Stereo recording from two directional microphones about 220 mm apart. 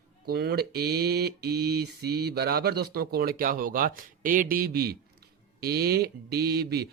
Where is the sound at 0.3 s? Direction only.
45° right (ahead or behind).